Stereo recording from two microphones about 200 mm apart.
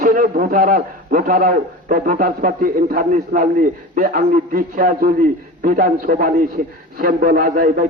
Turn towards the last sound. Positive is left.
turn(degrees=-40)  # may be behind; listen again after turning